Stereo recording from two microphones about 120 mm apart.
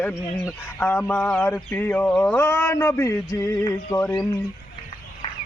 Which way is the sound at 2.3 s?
20° left (ahead or behind).